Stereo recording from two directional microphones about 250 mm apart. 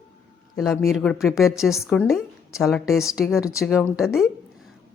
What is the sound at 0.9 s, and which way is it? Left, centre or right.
A woman's voice, centre.